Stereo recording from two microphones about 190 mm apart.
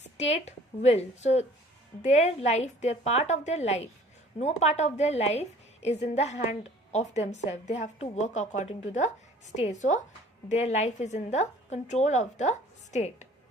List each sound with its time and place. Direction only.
0.2 s a woman's voice: 35° left (ahead or behind)